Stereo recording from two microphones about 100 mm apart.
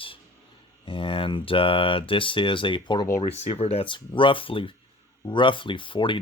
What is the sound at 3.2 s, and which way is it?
Speech, 90° left.